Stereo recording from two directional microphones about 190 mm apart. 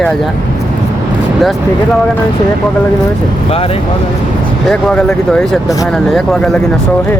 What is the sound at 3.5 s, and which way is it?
Speech, 30° left (ahead or behind).